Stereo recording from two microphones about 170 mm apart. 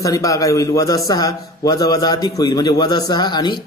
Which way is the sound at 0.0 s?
20° left (ahead or behind).